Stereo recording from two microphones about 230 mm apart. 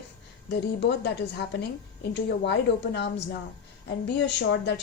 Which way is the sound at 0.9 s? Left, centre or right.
Left.